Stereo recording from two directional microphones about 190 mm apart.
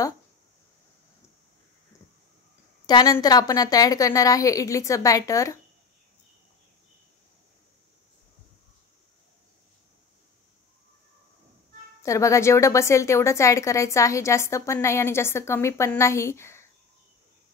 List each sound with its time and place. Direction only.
2.9 s a woman's voice: 20° left (ahead or behind)
12.0 s a woman's voice: 15° left (ahead or behind)